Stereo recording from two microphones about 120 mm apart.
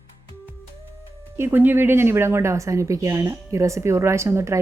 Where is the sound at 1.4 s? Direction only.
15° right (ahead or behind).